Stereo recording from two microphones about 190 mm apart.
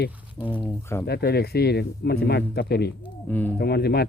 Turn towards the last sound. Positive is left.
turn(degrees=60)  # may be behind; listen again after turning